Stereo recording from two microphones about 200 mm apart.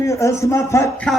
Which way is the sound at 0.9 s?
Centre (ahead or behind).